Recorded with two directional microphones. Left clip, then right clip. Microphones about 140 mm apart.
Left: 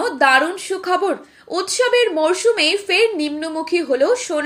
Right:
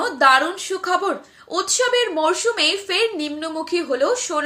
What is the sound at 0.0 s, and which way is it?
Speech, 15° left (ahead or behind).